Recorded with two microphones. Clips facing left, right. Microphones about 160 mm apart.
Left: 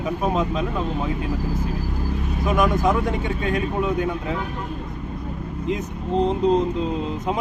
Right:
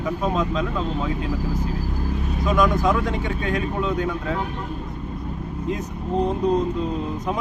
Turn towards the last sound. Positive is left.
turn(degrees=20)  # may be behind; listen again after turning